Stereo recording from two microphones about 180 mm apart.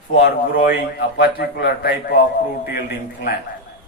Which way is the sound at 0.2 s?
60° left (ahead or behind).